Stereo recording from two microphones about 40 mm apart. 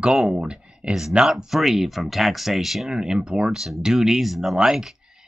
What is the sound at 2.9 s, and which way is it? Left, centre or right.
Speech, centre.